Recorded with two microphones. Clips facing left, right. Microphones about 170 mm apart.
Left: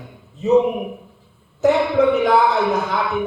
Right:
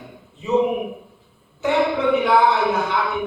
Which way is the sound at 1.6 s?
40° left (ahead or behind).